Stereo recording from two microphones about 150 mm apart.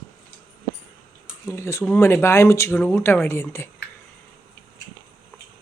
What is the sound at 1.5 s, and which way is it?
Speech, 20° left (ahead or behind).